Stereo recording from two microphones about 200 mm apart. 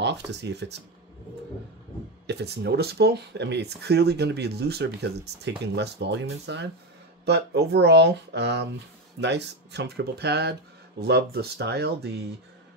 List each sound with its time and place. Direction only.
0.0 s speech: 60° right (ahead or behind)
2.2 s speech: 55° right (ahead or behind)